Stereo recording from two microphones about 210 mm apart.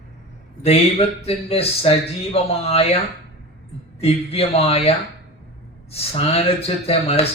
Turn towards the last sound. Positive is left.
turn(degrees=30)  # may be behind; listen again after turning